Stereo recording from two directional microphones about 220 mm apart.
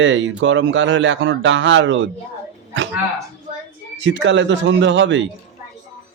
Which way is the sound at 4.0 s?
55° right (ahead or behind).